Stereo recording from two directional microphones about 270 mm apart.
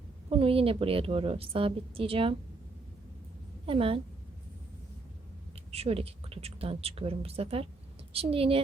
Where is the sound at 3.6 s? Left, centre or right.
Right.